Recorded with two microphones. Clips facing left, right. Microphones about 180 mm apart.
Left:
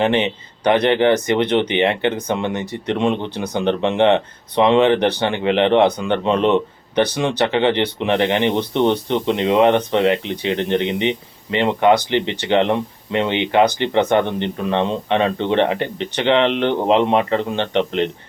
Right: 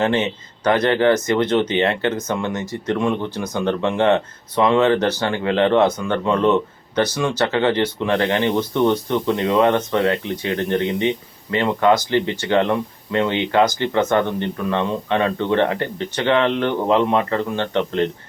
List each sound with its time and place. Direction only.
0.0 s speech: 20° left (ahead or behind)